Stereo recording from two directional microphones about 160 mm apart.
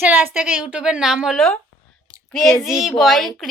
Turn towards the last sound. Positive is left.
turn(degrees=0)  # may be behind; listen again after turning